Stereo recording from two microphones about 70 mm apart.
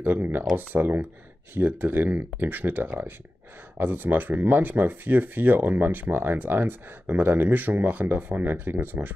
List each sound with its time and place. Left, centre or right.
0.0 s speech: right